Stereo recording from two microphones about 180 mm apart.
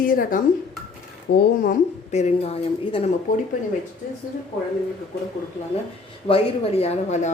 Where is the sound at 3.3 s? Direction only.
45° left (ahead or behind).